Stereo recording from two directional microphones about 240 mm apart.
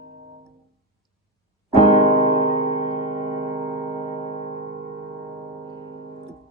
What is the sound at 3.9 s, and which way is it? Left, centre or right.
Music, left.